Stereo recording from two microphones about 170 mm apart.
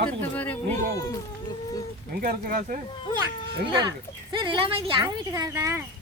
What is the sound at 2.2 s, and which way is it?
Speech, 55° right (ahead or behind).